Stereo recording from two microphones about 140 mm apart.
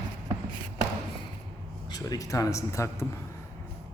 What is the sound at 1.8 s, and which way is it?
Speech, 30° left (ahead or behind).